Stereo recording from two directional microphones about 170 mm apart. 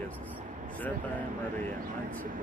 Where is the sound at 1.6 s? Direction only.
50° right (ahead or behind).